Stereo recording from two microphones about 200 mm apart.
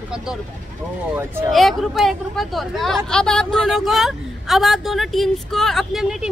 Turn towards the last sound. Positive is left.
turn(degrees=0)  # may be behind; listen again after turning